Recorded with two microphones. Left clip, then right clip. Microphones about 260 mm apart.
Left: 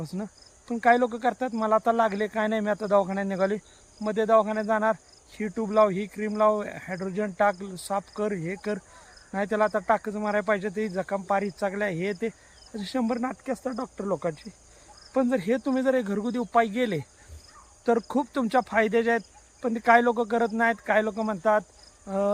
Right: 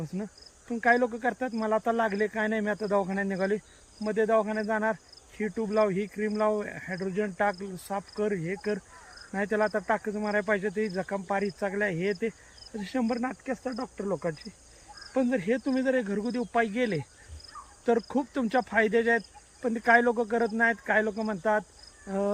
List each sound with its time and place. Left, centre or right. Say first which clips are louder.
0.0 s speech: left 1 dB; centre